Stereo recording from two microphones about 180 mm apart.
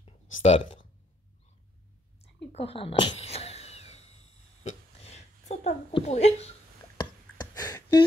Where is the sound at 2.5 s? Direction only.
35° left (ahead or behind).